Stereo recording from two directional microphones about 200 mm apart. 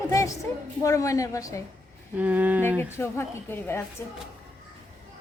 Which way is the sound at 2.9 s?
10° left (ahead or behind).